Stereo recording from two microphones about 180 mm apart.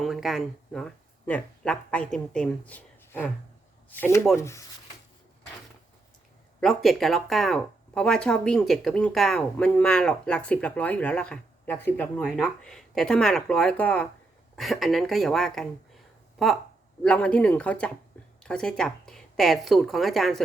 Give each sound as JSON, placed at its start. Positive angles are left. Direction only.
{"t": 0.0, "sound": "speech", "side_deg": 0}
{"t": 6.6, "sound": "speech", "side_deg": 0}